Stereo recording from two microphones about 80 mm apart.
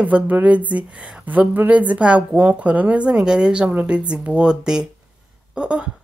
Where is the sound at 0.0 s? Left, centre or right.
Centre.